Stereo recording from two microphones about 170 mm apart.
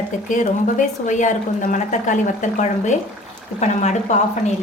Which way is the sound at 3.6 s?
45° left (ahead or behind).